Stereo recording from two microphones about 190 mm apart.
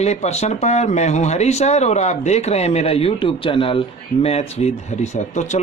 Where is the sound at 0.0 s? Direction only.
35° left (ahead or behind).